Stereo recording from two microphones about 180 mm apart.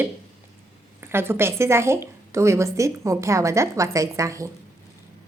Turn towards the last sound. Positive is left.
turn(degrees=-15)  # may be behind; listen again after turning